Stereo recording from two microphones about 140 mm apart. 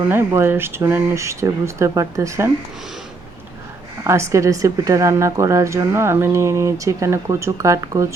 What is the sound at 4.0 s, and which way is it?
A woman's voice, 20° right (ahead or behind).